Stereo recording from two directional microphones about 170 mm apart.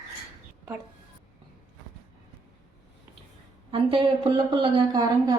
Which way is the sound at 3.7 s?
30° right (ahead or behind).